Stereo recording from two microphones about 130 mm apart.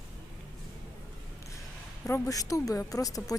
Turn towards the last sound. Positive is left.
turn(degrees=25)  # may be behind; listen again after turning